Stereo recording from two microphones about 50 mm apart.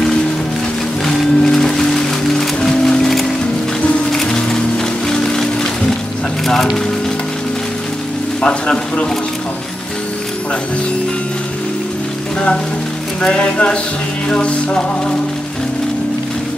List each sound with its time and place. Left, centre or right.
1.0 s music: centre
8.4 s music: centre
13.2 s speech: centre
14.3 s music: centre